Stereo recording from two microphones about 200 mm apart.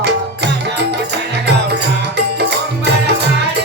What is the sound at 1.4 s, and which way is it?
Music, 60° right (ahead or behind).